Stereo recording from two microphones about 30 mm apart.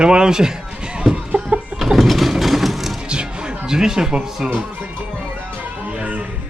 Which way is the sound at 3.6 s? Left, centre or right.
Right.